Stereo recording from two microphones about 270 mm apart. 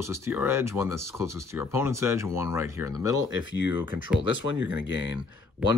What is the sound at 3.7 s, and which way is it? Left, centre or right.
Speech, centre.